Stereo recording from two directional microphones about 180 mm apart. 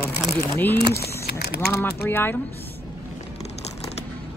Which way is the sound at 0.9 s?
60° left (ahead or behind).